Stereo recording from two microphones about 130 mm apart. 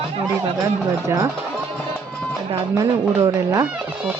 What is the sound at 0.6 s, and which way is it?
Speech, 25° right (ahead or behind).